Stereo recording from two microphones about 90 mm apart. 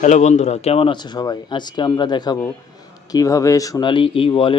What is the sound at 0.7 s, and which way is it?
Speech, 90° left.